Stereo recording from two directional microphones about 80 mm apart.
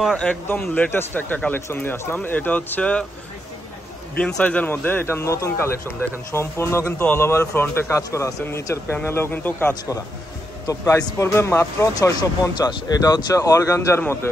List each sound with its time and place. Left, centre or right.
0.2 s a man's voice: centre
4.2 s a man's voice: centre
10.7 s a man's voice: left
11.9 s speech: left